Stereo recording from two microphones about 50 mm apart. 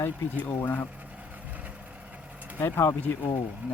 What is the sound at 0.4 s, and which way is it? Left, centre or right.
Speech, left.